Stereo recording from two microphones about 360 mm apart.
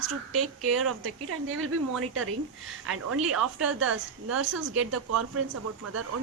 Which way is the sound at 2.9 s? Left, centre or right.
Right.